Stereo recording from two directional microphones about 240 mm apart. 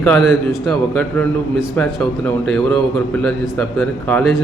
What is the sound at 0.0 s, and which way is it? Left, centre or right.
A man's voice, centre.